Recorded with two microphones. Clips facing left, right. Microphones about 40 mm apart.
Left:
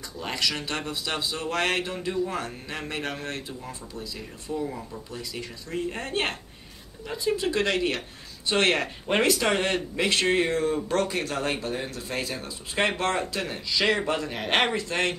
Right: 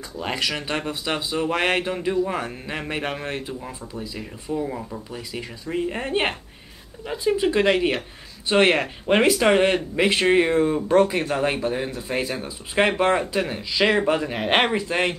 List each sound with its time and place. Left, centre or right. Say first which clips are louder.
0.2 s speech: right 3 dB; right